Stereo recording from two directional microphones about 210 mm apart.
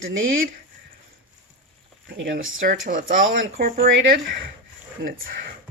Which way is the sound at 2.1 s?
60° right (ahead or behind).